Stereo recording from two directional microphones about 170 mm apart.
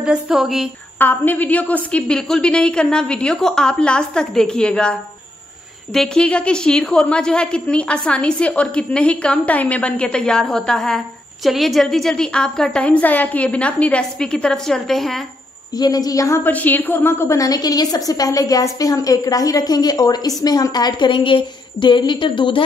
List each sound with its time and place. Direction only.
0.0 s a woman's voice: 5° right (ahead or behind)
0.9 s a woman's voice: 10° left (ahead or behind)
5.9 s a woman's voice: 5° left (ahead or behind)
15.8 s a woman's voice: 20° left (ahead or behind)